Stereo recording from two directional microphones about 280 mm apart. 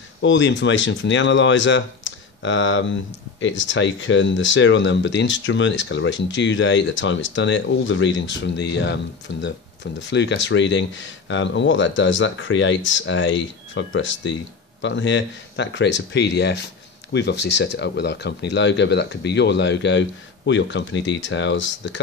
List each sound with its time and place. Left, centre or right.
0.2 s speech: left